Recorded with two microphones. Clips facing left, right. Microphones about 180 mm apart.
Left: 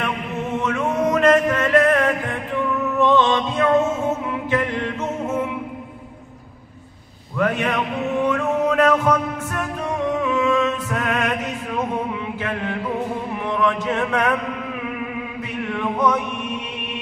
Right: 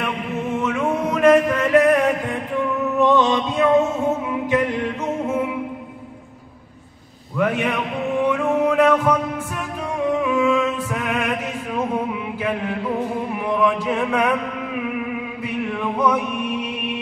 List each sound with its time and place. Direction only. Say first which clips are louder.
0.7 s music: left 3 dB; 5° right (ahead or behind)
4.5 s chant: right 2 dB; 15° right (ahead or behind)
7.3 s a man's voice: even; 5° right (ahead or behind)
8.3 s music: right 2 dB; 10° right (ahead or behind)
13.3 s a sound: right 2 dB; 10° right (ahead or behind)